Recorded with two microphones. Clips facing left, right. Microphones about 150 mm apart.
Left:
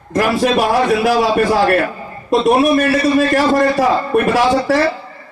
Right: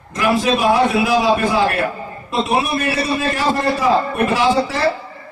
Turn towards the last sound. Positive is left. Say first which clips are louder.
# left 3 dB
turn(degrees=60)  # may be behind; listen again after turning